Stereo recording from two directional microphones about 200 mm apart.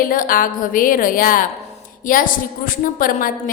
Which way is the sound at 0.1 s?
45° left (ahead or behind).